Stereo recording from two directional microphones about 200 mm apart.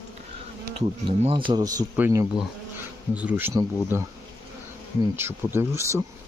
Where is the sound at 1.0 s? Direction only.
25° right (ahead or behind).